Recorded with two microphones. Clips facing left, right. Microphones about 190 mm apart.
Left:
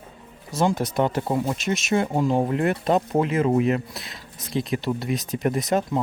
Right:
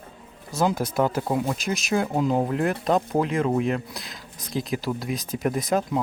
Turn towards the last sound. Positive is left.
turn(degrees=0)  # may be behind; listen again after turning